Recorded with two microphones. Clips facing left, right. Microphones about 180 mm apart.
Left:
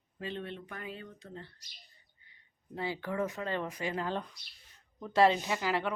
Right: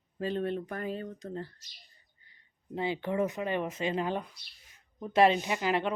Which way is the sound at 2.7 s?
20° right (ahead or behind).